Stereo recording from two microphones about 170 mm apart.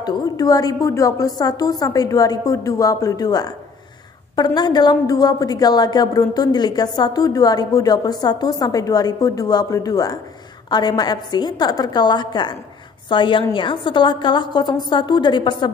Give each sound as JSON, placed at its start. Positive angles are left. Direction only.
{"t": 0.0, "sound": "a woman's voice", "side_deg": 25}
{"t": 4.6, "sound": "a woman's voice", "side_deg": 25}